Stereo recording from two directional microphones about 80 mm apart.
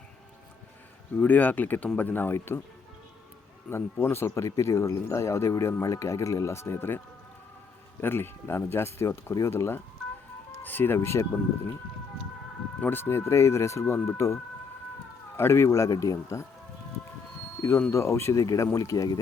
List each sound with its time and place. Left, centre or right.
1.1 s speech: left
3.7 s speech: left
8.0 s speech: left
12.8 s speech: left
17.9 s speech: left